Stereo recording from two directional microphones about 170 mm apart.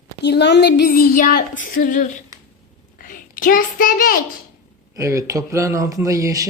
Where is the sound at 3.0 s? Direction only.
55° left (ahead or behind).